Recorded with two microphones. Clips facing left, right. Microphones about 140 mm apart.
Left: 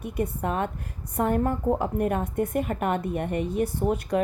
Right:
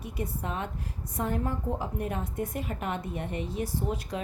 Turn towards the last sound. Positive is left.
turn(degrees=60)  # may be behind; listen again after turning